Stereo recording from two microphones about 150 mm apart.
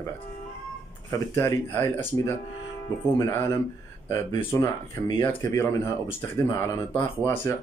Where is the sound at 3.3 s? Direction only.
15° left (ahead or behind).